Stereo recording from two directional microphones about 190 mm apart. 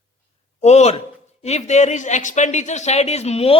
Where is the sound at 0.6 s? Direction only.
35° left (ahead or behind).